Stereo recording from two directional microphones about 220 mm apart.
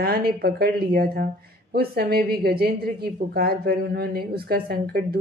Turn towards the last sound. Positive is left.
turn(degrees=-45)  # may be behind; listen again after turning